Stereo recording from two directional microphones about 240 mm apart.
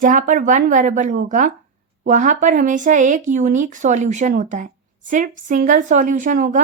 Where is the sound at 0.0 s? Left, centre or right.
Right.